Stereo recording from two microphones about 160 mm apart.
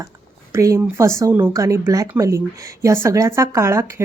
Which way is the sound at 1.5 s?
20° right (ahead or behind).